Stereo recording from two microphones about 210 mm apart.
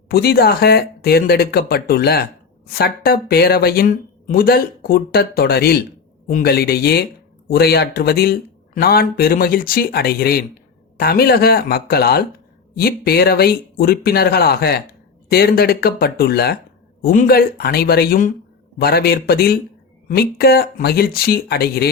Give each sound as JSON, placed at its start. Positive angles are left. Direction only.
{"t": 0.1, "sound": "speech", "side_deg": 45}